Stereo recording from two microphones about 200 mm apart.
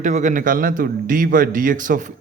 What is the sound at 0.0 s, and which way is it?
A man's voice, 35° right (ahead or behind).